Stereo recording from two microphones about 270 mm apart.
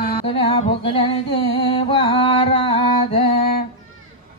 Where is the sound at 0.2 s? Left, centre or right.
Centre.